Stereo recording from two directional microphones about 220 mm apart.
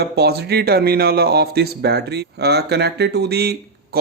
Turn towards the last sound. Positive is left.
turn(degrees=-45)  # may be behind; listen again after turning